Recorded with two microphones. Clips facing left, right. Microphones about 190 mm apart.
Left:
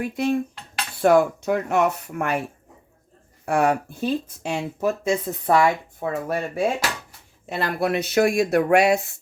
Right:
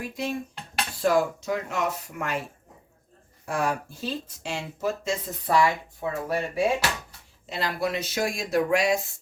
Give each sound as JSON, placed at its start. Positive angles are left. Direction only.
{"t": 0.0, "sound": "speech", "side_deg": 60}
{"t": 3.4, "sound": "speech", "side_deg": 65}